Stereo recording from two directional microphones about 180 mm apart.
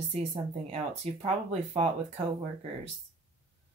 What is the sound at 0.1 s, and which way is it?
Speech, 35° right (ahead or behind).